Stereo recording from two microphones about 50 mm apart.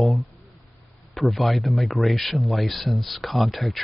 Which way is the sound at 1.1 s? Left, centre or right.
Centre.